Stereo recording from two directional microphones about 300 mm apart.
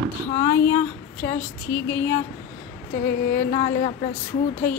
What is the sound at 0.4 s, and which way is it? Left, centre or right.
Female singing, centre.